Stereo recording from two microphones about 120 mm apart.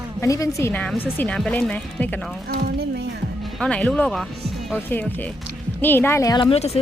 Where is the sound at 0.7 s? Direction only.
10° left (ahead or behind).